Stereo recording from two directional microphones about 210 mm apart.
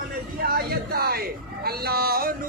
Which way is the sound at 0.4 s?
45° right (ahead or behind).